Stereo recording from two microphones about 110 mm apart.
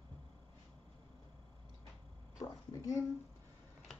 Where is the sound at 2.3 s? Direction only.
30° left (ahead or behind).